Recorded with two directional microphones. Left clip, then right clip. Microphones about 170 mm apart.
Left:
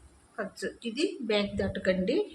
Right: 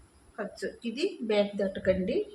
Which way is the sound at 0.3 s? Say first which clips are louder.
Even; 20° left (ahead or behind).